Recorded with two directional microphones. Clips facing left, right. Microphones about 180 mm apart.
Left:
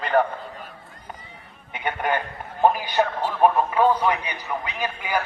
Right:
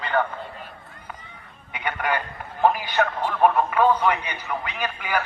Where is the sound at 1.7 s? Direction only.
20° left (ahead or behind).